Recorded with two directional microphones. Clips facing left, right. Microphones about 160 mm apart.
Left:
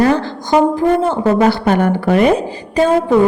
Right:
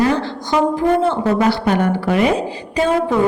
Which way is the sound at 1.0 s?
40° left (ahead or behind).